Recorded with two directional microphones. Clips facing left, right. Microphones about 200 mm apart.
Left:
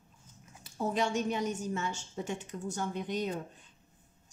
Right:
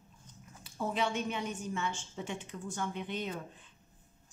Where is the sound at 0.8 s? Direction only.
40° left (ahead or behind).